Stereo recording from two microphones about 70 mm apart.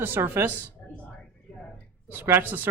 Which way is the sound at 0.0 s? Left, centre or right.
Right.